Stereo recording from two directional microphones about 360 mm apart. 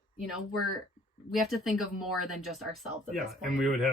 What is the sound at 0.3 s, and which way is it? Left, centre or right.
Speech, centre.